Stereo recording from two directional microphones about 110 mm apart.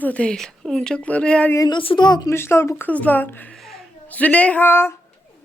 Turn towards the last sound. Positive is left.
turn(degrees=20)  # may be behind; listen again after turning